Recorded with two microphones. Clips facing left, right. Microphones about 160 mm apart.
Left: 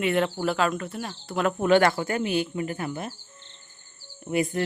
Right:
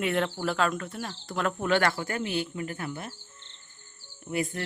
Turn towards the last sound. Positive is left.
turn(degrees=20)  # may be behind; listen again after turning